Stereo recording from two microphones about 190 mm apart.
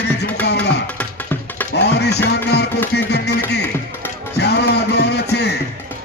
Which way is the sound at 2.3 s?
60° left (ahead or behind).